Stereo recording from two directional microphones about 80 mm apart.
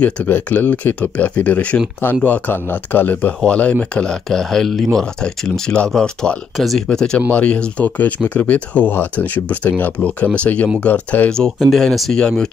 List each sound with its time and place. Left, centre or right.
0.0 s speech: left
11.7 s speech: centre